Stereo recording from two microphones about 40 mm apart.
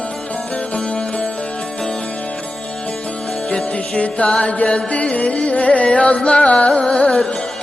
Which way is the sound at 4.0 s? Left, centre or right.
Left.